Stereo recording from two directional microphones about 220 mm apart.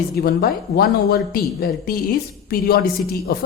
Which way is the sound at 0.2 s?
45° left (ahead or behind).